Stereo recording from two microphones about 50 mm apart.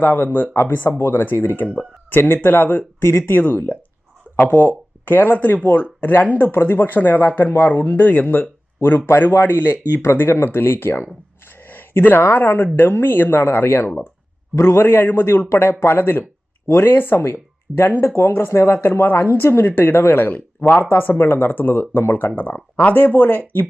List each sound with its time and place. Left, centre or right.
0.0 s speech: left
3.0 s speech: left
3.3 s speech: left
10.0 s speech: left
14.5 s a man's voice: left
14.8 s speech: left
15.8 s speech: left
16.6 s speech: left
18.2 s speech: left
20.9 s speech: left